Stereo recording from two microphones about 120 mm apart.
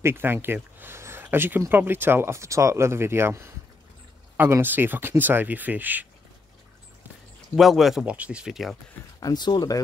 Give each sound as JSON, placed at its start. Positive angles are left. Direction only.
{"t": 0.0, "sound": "speech", "side_deg": -20}
{"t": 7.5, "sound": "speech", "side_deg": 0}
{"t": 9.2, "sound": "speech", "side_deg": 35}